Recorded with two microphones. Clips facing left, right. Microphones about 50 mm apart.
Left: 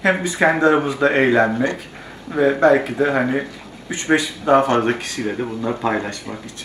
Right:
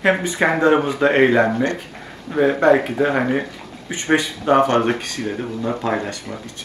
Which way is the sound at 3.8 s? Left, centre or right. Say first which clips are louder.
Even; right.